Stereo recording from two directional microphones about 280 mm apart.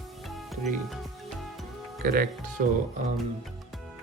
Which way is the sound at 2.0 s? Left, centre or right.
Right.